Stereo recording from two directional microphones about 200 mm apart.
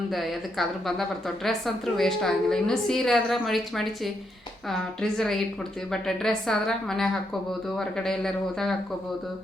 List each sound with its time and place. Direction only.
0.1 s a woman's voice: centre (ahead or behind)